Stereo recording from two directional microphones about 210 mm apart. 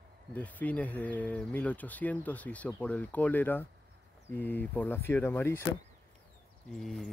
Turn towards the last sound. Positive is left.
turn(degrees=0)  # may be behind; listen again after turning